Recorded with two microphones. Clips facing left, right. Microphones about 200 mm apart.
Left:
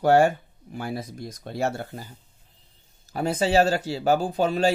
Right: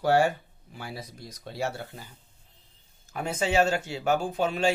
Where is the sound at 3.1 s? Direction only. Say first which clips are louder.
Left 5 dB; 35° left (ahead or behind).